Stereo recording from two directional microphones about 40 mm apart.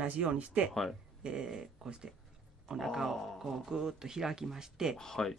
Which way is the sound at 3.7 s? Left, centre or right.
Centre.